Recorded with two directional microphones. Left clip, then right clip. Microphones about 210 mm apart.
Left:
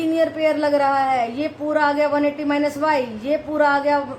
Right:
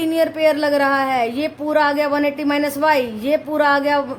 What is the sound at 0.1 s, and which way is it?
A woman's voice, 55° right (ahead or behind).